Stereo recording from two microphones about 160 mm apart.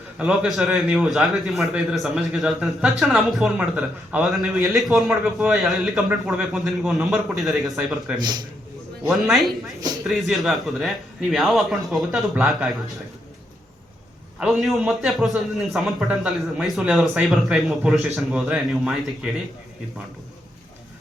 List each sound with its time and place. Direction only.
0.2 s a man's voice: 5° right (ahead or behind)
14.3 s a man's voice: 5° right (ahead or behind)